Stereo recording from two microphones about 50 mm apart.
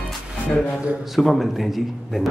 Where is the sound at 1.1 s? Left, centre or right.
Centre.